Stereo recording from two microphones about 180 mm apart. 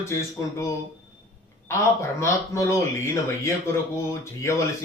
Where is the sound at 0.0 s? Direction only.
15° left (ahead or behind).